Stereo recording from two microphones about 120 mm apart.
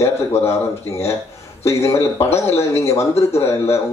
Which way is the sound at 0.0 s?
25° left (ahead or behind).